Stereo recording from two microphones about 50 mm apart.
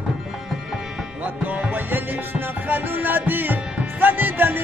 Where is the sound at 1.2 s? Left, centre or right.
Right.